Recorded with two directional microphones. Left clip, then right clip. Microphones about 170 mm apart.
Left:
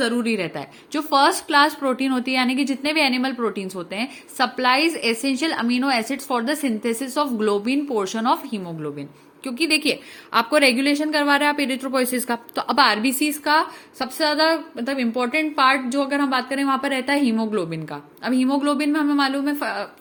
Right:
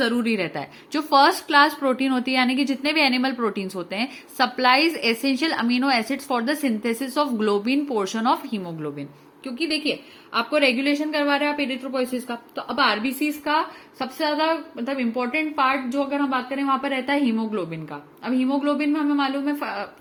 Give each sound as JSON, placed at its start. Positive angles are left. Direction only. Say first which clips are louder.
{"t": 0.0, "sound": "a woman's voice", "louder": "left 1 dB", "side_deg": 0}
{"t": 9.4, "sound": "a woman's voice", "louder": "left 5 dB", "side_deg": 35}